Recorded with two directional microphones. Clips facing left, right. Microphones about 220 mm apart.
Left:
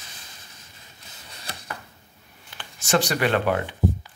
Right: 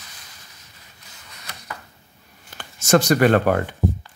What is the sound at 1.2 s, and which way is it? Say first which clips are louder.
Chopping: left 3 dB; 30° left (ahead or behind).